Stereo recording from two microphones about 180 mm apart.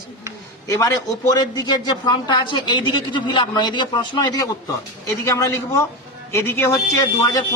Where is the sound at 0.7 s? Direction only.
20° left (ahead or behind).